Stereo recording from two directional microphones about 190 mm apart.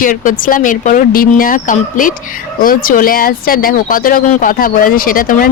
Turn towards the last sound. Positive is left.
turn(degrees=50)  # may be behind; listen again after turning